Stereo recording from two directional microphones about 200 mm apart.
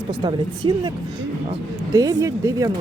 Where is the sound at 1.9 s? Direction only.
15° right (ahead or behind).